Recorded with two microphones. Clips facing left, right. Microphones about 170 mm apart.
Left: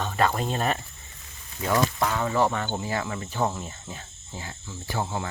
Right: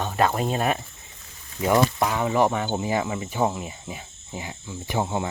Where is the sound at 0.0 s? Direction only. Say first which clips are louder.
Right 2 dB; 10° right (ahead or behind).